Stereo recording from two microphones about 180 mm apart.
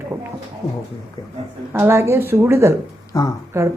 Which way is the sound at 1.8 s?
15° right (ahead or behind).